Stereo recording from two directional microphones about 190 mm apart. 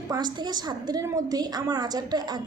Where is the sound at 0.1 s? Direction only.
20° right (ahead or behind).